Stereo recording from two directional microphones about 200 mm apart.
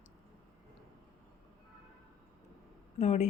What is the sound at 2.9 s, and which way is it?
Speech, 35° left (ahead or behind).